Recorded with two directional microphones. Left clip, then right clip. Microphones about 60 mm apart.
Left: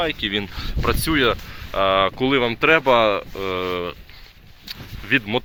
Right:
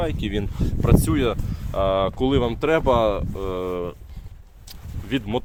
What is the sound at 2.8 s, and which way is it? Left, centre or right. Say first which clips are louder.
Speech: left 3 dB; right.